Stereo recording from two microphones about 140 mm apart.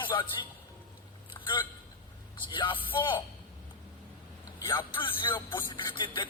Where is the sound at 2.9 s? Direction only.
35° left (ahead or behind).